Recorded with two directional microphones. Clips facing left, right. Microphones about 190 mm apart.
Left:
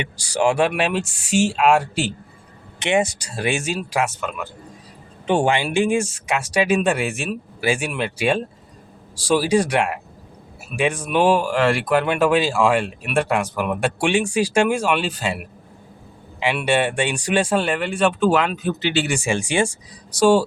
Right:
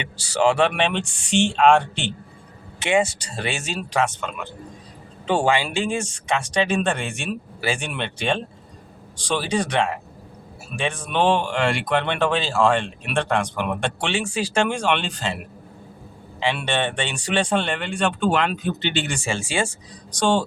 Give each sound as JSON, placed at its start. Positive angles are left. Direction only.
{"t": 0.2, "sound": "speech", "side_deg": 15}
{"t": 2.7, "sound": "speech", "side_deg": 20}
{"t": 5.2, "sound": "speech", "side_deg": 20}
{"t": 16.6, "sound": "speech", "side_deg": 10}